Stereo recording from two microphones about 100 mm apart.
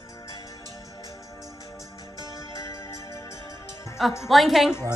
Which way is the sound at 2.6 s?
30° left (ahead or behind).